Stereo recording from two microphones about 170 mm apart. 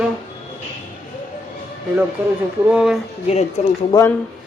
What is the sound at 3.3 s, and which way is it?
Speech, 40° left (ahead or behind).